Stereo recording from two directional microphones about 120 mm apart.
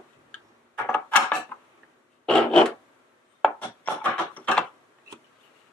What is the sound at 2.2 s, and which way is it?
Filing, 5° left (ahead or behind).